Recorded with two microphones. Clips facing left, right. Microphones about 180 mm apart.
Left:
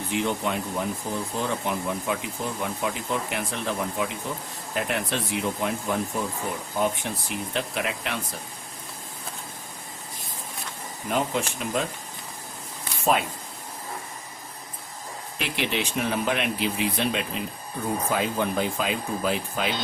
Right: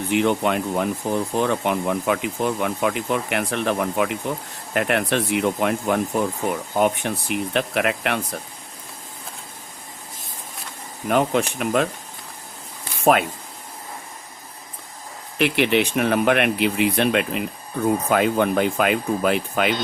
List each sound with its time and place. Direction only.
0.1 s speech: 65° right (ahead or behind)
11.1 s speech: 65° right (ahead or behind)
15.4 s speech: 65° right (ahead or behind)